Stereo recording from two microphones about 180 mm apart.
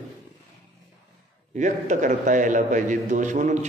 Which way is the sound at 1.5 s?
45° right (ahead or behind).